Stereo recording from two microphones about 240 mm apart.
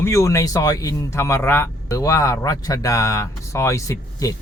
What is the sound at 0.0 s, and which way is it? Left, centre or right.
Speech, centre.